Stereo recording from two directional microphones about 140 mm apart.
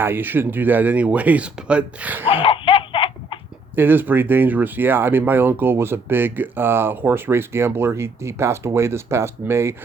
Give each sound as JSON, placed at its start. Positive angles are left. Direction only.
{"t": 0.0, "sound": "speech", "side_deg": -15}
{"t": 2.4, "sound": "baby laughter", "side_deg": 40}
{"t": 3.8, "sound": "speech", "side_deg": -15}